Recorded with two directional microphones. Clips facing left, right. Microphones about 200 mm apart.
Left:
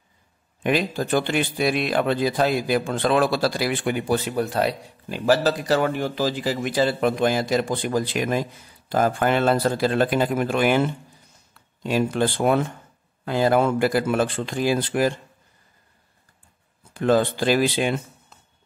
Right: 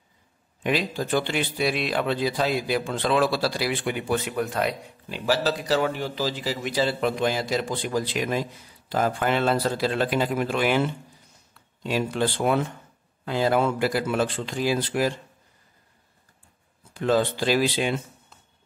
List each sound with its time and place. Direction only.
0.7 s a man's voice: 50° left (ahead or behind); by 4.7 s 35° left (ahead or behind)
5.1 s a man's voice: 50° left (ahead or behind)
11.8 s a man's voice: 50° left (ahead or behind)
16.9 s a man's voice: 50° left (ahead or behind)